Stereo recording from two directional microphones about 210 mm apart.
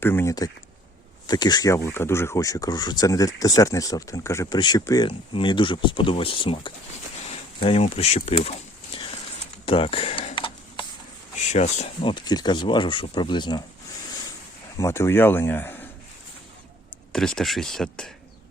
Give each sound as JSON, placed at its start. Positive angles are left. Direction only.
{"t": 0.0, "sound": "speech", "side_deg": 10}
{"t": 8.9, "sound": "a sound", "side_deg": 25}
{"t": 11.4, "sound": "speech", "side_deg": 35}
{"t": 14.8, "sound": "speech", "side_deg": 15}
{"t": 17.1, "sound": "speech", "side_deg": 5}